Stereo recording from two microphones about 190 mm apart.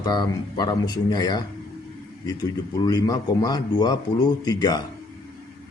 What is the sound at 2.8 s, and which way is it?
Speech, 20° left (ahead or behind).